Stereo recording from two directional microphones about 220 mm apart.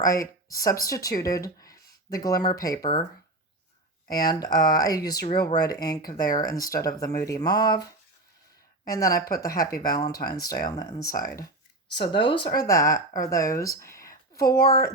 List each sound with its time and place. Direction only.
0.0 s speech: 15° left (ahead or behind)
4.1 s speech: 15° left (ahead or behind)
8.9 s speech: 15° left (ahead or behind)